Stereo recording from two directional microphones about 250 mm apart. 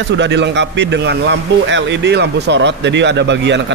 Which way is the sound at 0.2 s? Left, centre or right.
Right.